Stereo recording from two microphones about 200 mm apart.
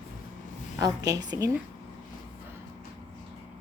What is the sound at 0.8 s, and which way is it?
Speech, 15° right (ahead or behind).